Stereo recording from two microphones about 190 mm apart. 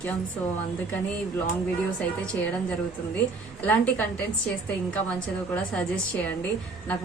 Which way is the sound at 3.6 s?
10° left (ahead or behind).